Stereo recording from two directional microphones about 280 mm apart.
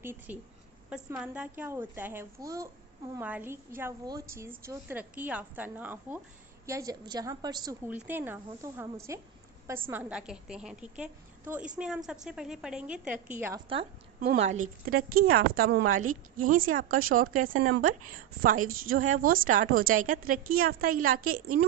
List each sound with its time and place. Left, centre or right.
0.0 s a woman's voice: centre
14.4 s a woman's voice: right